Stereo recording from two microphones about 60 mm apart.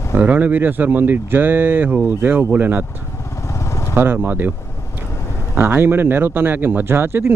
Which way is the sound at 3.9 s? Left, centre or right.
Right.